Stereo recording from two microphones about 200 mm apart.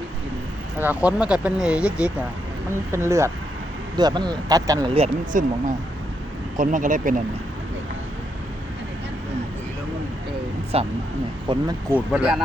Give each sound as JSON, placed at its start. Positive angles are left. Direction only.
{"t": 0.8, "sound": "speech", "side_deg": -10}
{"t": 4.9, "sound": "speech", "side_deg": -35}
{"t": 10.7, "sound": "speech", "side_deg": -30}
{"t": 11.9, "sound": "speech", "side_deg": -5}